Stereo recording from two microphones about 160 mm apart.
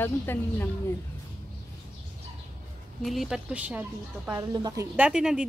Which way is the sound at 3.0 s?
Centre (ahead or behind).